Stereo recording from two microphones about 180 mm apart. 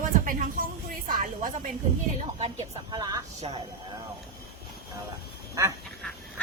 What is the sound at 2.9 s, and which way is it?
Speech, 20° right (ahead or behind).